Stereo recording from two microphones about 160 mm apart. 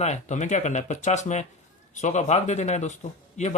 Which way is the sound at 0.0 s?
45° left (ahead or behind).